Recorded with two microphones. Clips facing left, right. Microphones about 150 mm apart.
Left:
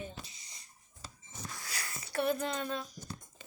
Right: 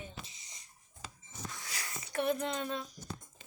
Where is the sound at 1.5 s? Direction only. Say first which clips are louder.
Even; 20° right (ahead or behind).